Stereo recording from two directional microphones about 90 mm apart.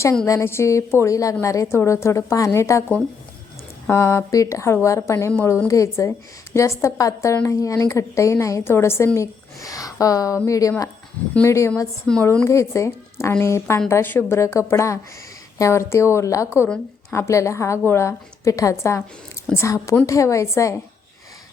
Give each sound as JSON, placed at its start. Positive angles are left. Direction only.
{"t": 0.3, "sound": "a woman's voice", "side_deg": 30}
{"t": 3.9, "sound": "a woman's voice", "side_deg": 35}
{"t": 12.1, "sound": "a woman's voice", "side_deg": 10}
{"t": 12.5, "sound": "a woman's voice", "side_deg": 35}